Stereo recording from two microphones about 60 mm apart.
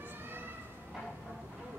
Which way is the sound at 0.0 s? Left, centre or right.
Right.